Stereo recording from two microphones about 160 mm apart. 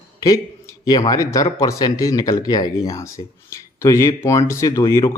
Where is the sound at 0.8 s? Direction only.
25° left (ahead or behind).